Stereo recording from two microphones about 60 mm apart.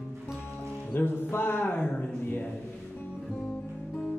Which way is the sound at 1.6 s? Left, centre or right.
Left.